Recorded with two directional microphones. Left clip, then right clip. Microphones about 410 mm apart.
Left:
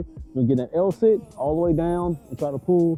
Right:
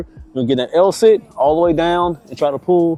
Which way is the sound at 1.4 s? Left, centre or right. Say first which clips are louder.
Right 10 dB; centre.